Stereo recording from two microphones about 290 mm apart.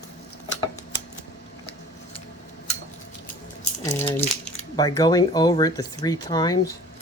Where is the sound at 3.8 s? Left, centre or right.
Centre.